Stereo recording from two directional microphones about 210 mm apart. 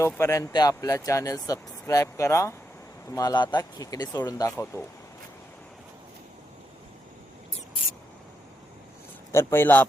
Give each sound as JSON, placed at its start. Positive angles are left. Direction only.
{"t": 0.0, "sound": "speech", "side_deg": 15}
{"t": 9.3, "sound": "speech", "side_deg": 10}